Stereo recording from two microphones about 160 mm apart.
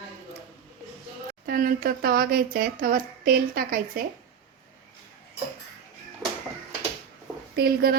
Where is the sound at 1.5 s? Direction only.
65° right (ahead or behind).